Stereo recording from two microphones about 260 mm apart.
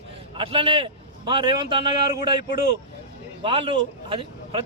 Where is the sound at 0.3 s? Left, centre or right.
Right.